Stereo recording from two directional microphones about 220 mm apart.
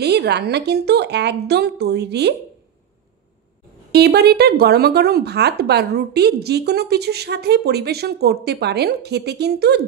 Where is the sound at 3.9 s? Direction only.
45° right (ahead or behind).